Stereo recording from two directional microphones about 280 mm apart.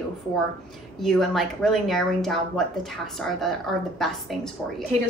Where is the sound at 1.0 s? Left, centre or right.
Centre.